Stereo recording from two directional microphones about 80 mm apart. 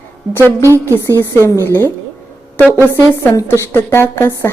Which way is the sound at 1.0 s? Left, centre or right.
Left.